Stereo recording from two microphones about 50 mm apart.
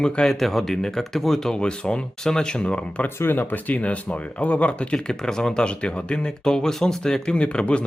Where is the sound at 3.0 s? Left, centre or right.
Left.